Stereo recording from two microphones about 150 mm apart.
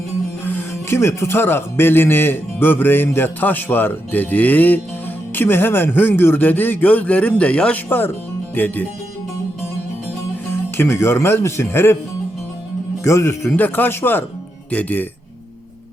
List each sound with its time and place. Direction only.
0.4 s speech: 15° left (ahead or behind)
10.8 s speech: 15° left (ahead or behind)
13.1 s speech: 20° left (ahead or behind)